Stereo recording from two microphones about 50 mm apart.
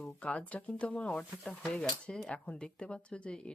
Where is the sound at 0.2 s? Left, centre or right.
Left.